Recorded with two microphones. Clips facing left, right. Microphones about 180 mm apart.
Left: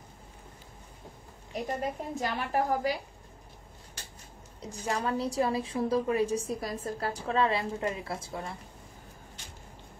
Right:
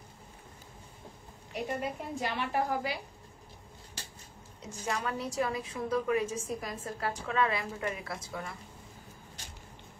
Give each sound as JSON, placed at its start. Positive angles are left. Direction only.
{"t": 1.5, "sound": "a woman's voice", "side_deg": 40}
{"t": 4.6, "sound": "a woman's voice", "side_deg": 35}